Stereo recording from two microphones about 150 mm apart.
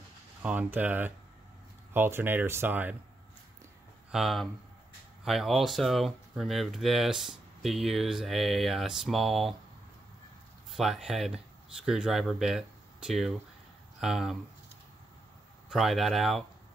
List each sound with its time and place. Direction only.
0.4 s speech: 10° right (ahead or behind)
4.1 s speech: centre (ahead or behind)
10.7 s speech: centre (ahead or behind)
15.7 s speech: centre (ahead or behind)